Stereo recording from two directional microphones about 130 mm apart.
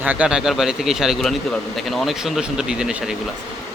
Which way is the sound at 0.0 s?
10° right (ahead or behind).